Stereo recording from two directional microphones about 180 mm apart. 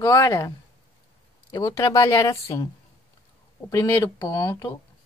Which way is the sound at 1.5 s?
20° left (ahead or behind).